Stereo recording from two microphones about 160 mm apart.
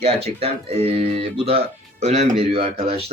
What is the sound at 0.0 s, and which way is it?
Speech, 40° right (ahead or behind).